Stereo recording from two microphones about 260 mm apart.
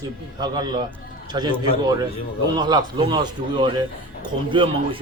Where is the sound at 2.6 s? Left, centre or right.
Centre.